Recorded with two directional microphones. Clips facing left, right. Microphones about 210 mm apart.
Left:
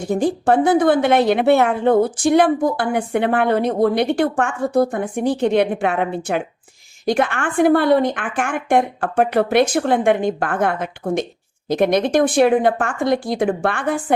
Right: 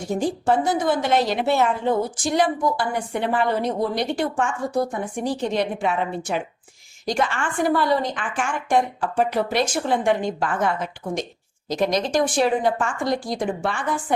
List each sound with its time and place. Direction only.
0.1 s a woman's voice: 60° left (ahead or behind)